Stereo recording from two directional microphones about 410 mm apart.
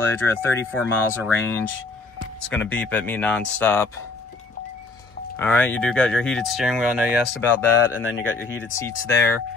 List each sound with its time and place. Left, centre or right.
0.0 s speech: centre
5.4 s speech: centre